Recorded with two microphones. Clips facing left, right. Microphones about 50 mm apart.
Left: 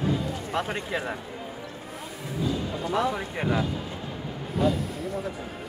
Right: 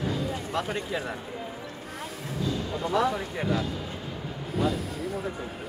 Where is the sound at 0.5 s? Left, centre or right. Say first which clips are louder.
Left 3 dB; left.